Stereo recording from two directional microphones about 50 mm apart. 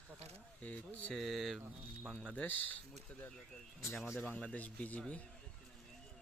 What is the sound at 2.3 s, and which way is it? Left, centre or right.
Speech, left.